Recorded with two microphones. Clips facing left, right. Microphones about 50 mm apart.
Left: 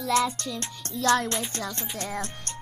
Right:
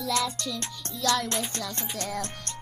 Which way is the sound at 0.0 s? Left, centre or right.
Left.